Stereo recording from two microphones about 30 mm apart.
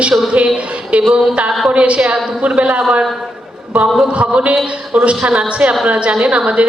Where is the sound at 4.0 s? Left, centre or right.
Right.